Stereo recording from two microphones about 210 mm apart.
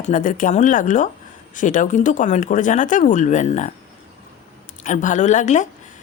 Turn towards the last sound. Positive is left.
turn(degrees=35)  # may be behind; listen again after turning